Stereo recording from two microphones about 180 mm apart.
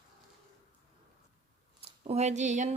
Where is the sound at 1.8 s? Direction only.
35° right (ahead or behind).